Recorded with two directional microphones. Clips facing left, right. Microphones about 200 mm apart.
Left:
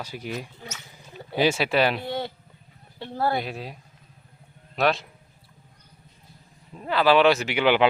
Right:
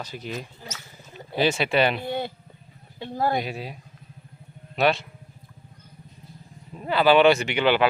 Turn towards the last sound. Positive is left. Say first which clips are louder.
# left 1 dB
turn(degrees=15)  # may be behind; listen again after turning